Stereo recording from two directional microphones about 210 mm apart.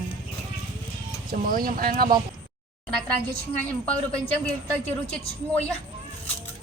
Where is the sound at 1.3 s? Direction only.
40° right (ahead or behind).